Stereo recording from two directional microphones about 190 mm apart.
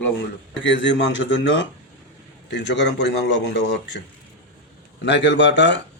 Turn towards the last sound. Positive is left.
turn(degrees=70)  # may be behind; listen again after turning